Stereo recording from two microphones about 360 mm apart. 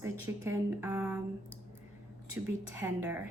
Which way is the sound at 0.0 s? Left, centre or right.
Centre.